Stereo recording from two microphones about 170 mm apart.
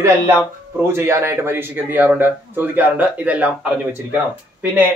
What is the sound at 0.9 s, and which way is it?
Speech, 15° right (ahead or behind).